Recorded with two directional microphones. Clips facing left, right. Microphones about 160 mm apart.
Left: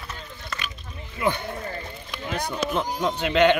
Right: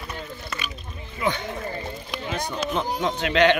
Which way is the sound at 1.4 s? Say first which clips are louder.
Right 2 dB; 20° right (ahead or behind).